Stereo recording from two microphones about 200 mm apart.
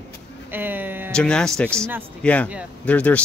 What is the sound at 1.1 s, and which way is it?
Speech, 5° left (ahead or behind).